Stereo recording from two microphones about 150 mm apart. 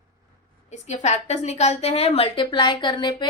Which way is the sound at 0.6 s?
50° left (ahead or behind).